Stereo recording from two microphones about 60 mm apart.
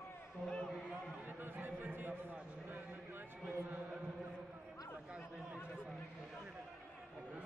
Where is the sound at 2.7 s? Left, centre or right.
Right.